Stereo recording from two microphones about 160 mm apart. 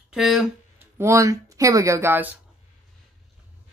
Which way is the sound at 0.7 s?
15° right (ahead or behind).